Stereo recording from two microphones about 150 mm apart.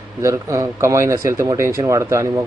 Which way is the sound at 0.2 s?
20° right (ahead or behind).